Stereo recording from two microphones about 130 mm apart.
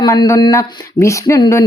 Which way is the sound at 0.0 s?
25° left (ahead or behind).